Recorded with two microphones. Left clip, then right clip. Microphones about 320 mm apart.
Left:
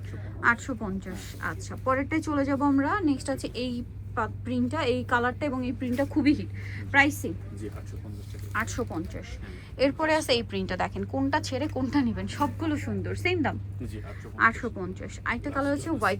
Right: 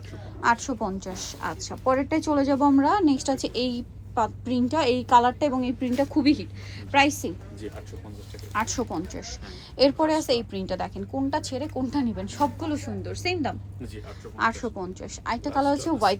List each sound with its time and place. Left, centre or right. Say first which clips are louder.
0.4 s a woman's voice: right 2 dB; centre
8.5 s a woman's voice: right 3 dB; centre